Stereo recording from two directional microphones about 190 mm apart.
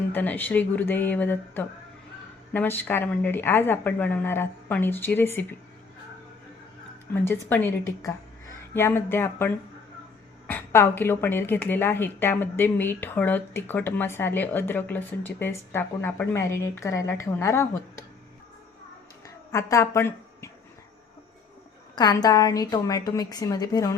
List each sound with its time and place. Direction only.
0.1 s speech: 10° left (ahead or behind)
7.1 s speech: 10° left (ahead or behind)
19.5 s speech: 15° left (ahead or behind)
21.9 s a woman's voice: 20° left (ahead or behind)